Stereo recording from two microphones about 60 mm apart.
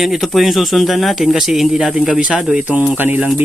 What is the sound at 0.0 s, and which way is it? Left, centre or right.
Speech, centre.